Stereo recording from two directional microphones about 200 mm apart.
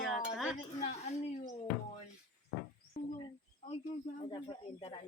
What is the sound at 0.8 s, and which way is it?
Speech, 35° left (ahead or behind).